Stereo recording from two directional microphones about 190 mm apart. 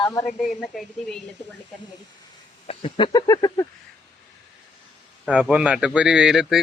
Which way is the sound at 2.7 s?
30° left (ahead or behind).